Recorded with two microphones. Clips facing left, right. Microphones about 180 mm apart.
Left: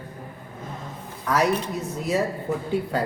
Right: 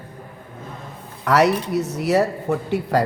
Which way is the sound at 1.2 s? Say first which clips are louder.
Right 5 dB; 75° right (ahead or behind).